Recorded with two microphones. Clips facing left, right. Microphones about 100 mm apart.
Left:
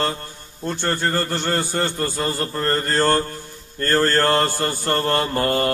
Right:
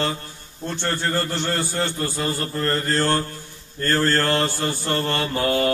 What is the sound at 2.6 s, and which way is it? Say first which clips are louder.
Mantra: left 2 dB; 50° left (ahead or behind).